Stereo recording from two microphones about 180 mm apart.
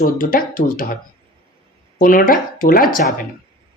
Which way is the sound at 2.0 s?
50° left (ahead or behind).